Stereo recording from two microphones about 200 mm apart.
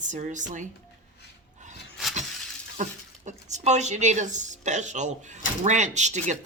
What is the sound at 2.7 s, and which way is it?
Speech, 35° right (ahead or behind).